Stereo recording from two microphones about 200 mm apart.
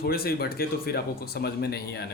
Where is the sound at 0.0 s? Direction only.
50° left (ahead or behind).